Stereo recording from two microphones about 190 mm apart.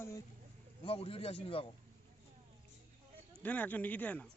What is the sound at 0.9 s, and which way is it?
Speech, 30° left (ahead or behind).